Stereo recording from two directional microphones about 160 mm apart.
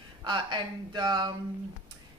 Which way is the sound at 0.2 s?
30° right (ahead or behind).